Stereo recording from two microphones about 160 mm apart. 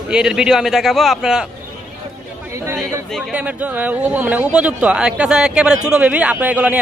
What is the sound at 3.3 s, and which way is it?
A man's voice, 10° right (ahead or behind).